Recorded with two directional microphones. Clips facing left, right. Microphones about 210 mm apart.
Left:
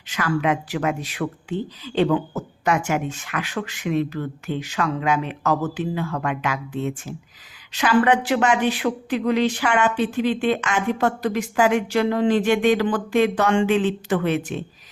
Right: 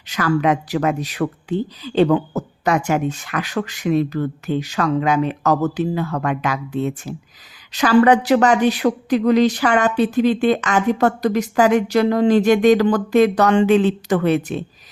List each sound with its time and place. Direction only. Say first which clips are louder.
0.1 s speech: right 4 dB; 40° right (ahead or behind)
2.6 s speech: right 3 dB; 35° right (ahead or behind)